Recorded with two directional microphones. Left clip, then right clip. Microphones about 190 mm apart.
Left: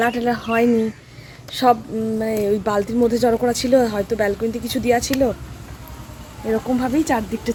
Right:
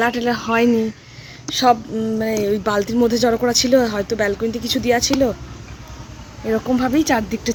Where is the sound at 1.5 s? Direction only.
Centre (ahead or behind).